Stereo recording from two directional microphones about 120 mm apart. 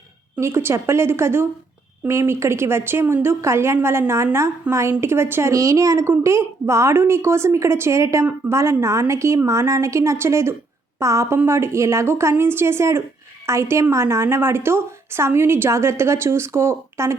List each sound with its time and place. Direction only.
0.3 s a woman's voice: 20° right (ahead or behind)